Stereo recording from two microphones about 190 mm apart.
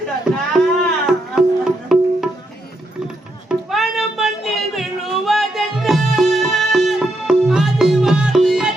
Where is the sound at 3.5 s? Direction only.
Centre (ahead or behind).